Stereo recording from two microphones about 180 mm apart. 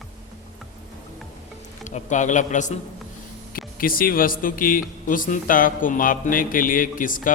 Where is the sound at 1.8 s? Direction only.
45° left (ahead or behind).